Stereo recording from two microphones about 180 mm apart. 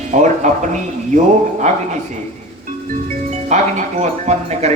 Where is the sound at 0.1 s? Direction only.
45° right (ahead or behind).